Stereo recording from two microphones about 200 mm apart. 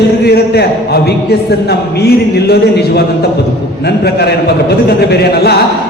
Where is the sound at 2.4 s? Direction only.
50° left (ahead or behind).